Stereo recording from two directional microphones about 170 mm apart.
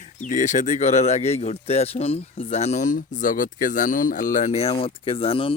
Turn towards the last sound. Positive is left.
turn(degrees=35)  # may be behind; listen again after turning